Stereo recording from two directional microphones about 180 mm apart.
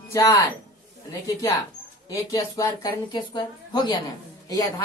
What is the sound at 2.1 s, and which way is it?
Speech, 20° left (ahead or behind).